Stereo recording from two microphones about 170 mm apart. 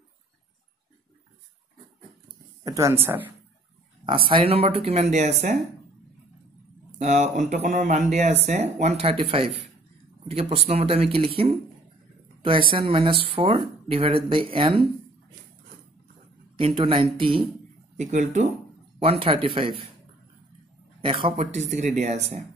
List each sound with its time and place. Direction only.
2.2 s a sound: 20° right (ahead or behind)
4.0 s speech: 30° right (ahead or behind)
7.0 s speech: 45° right (ahead or behind)
10.7 s speech: 35° right (ahead or behind)
16.5 s speech: 30° right (ahead or behind)
17.9 s speech: 45° right (ahead or behind)
18.9 s speech: 35° right (ahead or behind)
21.0 s speech: 30° right (ahead or behind)
21.4 s speech: 40° right (ahead or behind)